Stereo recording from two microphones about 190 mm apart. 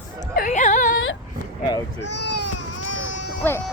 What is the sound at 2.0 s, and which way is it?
Speech, 65° left (ahead or behind).